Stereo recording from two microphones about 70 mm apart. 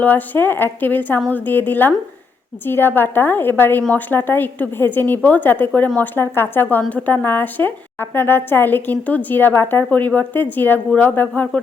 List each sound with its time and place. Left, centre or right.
0.0 s a woman's voice: left